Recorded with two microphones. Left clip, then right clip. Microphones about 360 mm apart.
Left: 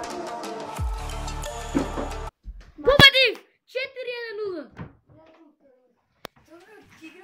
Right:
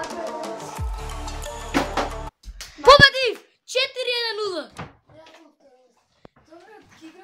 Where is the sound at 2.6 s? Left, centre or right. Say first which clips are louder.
Right 9 dB; right.